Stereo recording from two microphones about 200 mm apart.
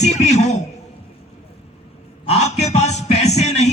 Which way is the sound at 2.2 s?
35° left (ahead or behind).